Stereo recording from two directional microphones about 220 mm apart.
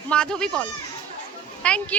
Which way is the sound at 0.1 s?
5° left (ahead or behind).